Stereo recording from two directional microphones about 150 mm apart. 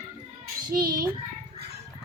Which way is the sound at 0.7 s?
75° right (ahead or behind).